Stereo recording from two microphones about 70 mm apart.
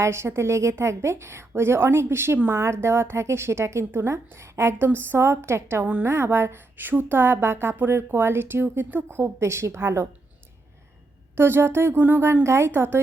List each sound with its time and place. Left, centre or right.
0.0 s a woman's voice: right
9.0 s a woman's voice: right
11.3 s a woman's voice: right